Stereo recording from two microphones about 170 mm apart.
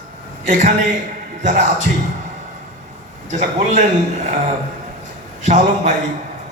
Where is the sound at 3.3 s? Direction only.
45° right (ahead or behind).